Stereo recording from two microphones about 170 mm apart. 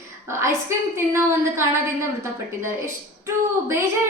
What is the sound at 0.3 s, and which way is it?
A woman's voice, 15° right (ahead or behind).